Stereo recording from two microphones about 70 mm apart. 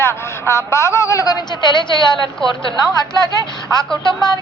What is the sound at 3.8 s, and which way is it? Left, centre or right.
Speech, centre.